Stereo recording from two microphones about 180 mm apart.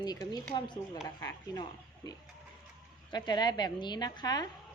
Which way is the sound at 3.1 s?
25° left (ahead or behind).